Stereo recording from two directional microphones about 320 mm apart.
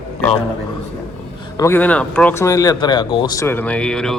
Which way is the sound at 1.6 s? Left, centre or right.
Centre.